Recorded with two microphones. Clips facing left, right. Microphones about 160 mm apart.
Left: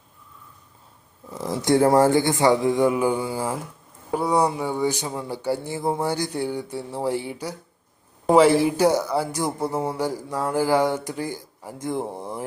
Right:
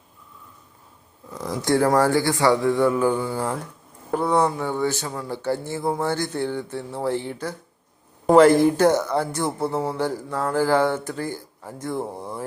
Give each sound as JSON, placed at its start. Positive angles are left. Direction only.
{"t": 1.5, "sound": "speech", "side_deg": 20}